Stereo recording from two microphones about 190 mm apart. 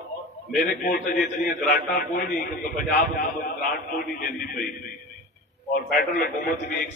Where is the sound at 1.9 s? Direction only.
45° left (ahead or behind).